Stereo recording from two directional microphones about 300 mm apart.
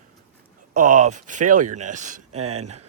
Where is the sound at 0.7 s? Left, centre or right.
Right.